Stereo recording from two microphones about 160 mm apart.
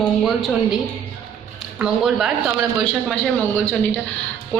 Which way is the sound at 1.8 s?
5° right (ahead or behind).